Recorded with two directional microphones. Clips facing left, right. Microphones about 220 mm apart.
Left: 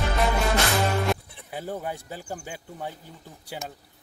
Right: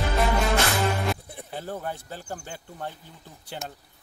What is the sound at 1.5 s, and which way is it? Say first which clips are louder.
Speech: left 1 dB; 10° left (ahead or behind).